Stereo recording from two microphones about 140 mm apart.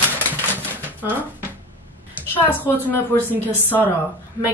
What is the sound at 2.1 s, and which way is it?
A woman's voice, 15° left (ahead or behind).